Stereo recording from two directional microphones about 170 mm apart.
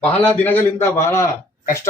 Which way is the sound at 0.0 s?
10° left (ahead or behind).